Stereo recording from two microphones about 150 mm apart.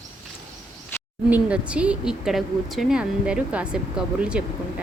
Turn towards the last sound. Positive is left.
turn(degrees=-5)  # may be behind; listen again after turning